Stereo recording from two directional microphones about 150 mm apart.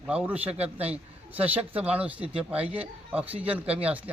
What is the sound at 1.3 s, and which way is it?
A man's voice, 10° right (ahead or behind).